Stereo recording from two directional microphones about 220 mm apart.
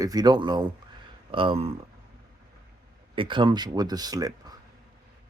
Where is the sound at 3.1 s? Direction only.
25° right (ahead or behind).